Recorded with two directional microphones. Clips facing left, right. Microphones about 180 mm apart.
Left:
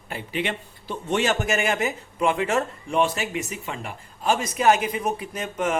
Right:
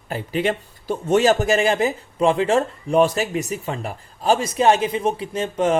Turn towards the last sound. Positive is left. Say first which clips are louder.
# right 6 dB
turn(degrees=-30)  # may be behind; listen again after turning